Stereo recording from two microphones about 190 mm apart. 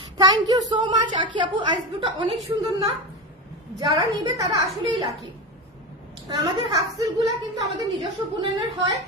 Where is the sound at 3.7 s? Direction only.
20° right (ahead or behind).